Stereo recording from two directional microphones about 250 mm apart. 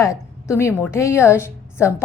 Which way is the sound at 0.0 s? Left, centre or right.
Centre.